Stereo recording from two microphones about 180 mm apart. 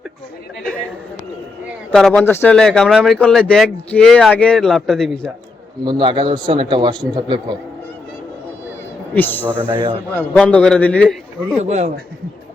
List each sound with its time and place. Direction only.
1.9 s speech: 5° left (ahead or behind)
5.8 s a man's voice: 25° right (ahead or behind)
9.1 s a man's voice: 10° left (ahead or behind)
11.5 s a man's voice: 40° right (ahead or behind)